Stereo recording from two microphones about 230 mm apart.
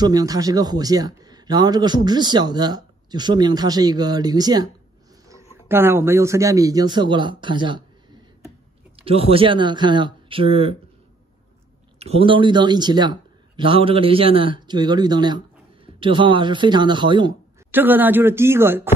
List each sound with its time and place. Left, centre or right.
0.0 s a man's voice: centre
8.9 s speech: right
12.0 s speech: right
17.6 s a man's voice: centre